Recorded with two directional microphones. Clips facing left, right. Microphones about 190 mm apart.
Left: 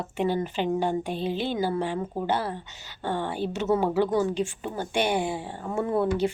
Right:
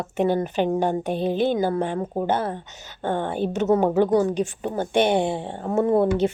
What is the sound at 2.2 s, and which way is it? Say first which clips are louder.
Speech: right 4 dB; 20° right (ahead or behind).